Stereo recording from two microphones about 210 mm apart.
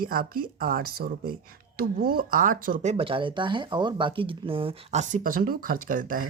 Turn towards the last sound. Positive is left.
turn(degrees=-40)  # may be behind; listen again after turning